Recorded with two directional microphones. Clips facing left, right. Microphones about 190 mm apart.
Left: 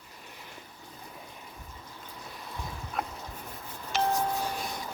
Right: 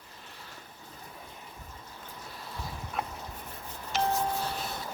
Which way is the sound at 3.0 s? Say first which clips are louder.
Left 1 dB; centre (ahead or behind).